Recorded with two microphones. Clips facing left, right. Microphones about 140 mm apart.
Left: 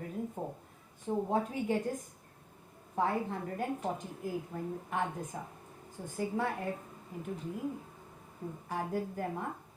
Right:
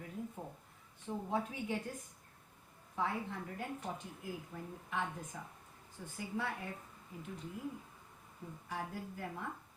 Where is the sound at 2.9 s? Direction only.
45° left (ahead or behind).